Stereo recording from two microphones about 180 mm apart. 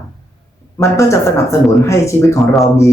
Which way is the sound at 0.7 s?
15° left (ahead or behind).